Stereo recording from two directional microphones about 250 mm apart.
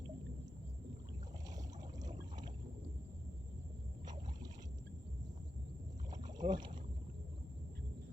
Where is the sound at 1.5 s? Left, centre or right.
Centre.